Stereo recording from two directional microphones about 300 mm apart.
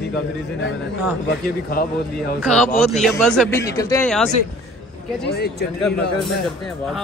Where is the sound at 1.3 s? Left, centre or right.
Left.